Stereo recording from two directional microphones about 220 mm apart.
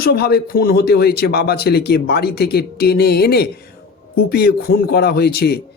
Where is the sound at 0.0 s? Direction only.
45° left (ahead or behind).